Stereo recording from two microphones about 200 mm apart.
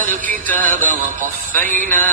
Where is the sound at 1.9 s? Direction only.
40° right (ahead or behind).